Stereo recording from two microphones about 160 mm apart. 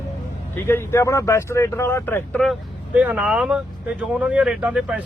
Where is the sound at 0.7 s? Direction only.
15° left (ahead or behind).